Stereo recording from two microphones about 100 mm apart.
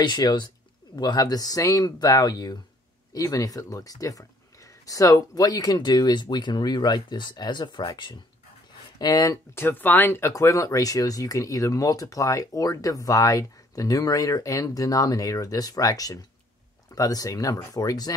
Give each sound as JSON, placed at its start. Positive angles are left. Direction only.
{"t": 0.0, "sound": "speech", "side_deg": 45}
{"t": 9.6, "sound": "speech", "side_deg": 20}